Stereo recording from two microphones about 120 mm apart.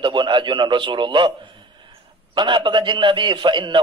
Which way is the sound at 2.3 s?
40° right (ahead or behind).